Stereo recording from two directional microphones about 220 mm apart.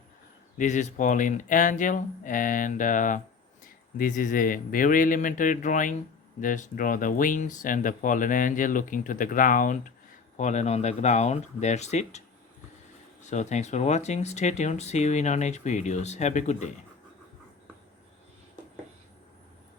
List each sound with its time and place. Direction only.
0.6 s speech: 35° left (ahead or behind)
13.2 s speech: 30° left (ahead or behind)